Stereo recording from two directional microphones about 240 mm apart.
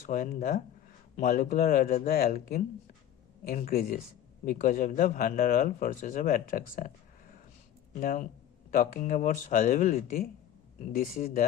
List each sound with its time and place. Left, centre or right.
0.0 s speech: left
8.0 s speech: left